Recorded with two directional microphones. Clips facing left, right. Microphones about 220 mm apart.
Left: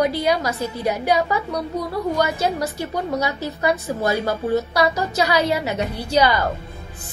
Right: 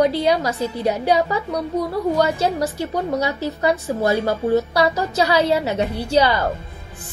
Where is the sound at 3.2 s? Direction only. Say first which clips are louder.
Right 2 dB; 30° right (ahead or behind).